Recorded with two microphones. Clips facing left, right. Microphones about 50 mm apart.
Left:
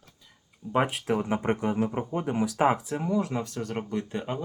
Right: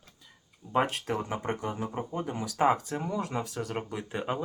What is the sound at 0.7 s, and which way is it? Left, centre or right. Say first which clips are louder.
Speech: left 2 dB; centre.